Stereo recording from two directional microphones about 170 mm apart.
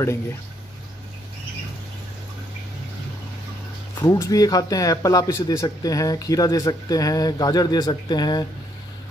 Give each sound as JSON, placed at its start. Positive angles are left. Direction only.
{"t": 4.0, "sound": "speech", "side_deg": 20}